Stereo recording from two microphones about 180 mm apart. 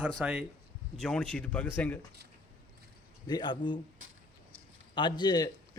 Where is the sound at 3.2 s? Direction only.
25° left (ahead or behind).